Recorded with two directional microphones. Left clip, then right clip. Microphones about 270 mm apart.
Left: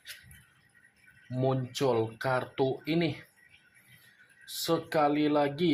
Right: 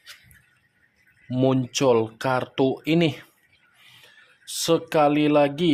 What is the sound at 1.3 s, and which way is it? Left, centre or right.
Speech, right.